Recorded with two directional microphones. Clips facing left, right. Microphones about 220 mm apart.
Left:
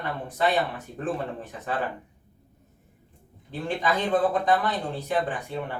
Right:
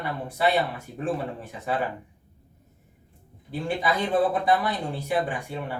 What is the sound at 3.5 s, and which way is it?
Speech, 10° right (ahead or behind).